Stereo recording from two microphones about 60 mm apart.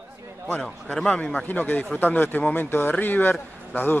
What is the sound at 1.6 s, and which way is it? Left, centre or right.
A man's voice, left.